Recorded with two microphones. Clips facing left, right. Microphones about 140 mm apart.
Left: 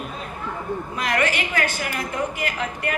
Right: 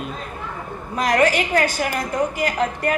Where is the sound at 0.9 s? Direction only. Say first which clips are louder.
Right 7 dB; 45° right (ahead or behind).